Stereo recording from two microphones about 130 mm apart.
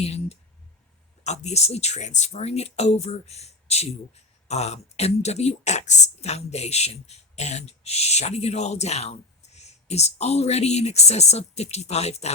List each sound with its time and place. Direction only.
0.0 s speech: 55° left (ahead or behind)